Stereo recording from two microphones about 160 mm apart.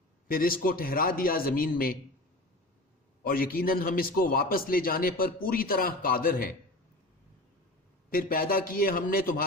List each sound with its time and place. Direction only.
0.3 s a man's voice: 65° left (ahead or behind)
3.2 s a man's voice: 65° left (ahead or behind)
8.1 s a man's voice: 65° left (ahead or behind)